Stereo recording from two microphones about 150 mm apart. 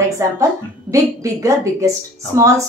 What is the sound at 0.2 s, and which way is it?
A woman's voice, 20° right (ahead or behind).